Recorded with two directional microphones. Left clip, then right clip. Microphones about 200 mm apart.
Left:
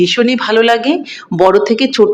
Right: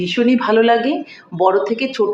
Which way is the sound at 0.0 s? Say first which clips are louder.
Left 5 dB; 55° left (ahead or behind).